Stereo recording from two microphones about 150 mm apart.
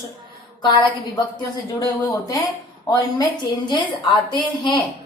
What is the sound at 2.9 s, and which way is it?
A woman's voice, 20° left (ahead or behind).